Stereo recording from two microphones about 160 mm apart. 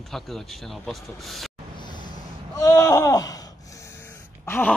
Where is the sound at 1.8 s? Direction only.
30° left (ahead or behind).